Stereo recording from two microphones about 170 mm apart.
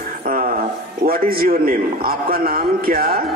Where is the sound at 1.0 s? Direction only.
60° right (ahead or behind).